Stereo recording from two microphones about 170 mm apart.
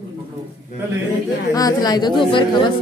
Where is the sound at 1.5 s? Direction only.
20° left (ahead or behind).